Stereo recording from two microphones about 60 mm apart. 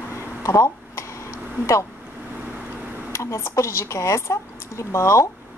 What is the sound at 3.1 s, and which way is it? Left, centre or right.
Speech, left.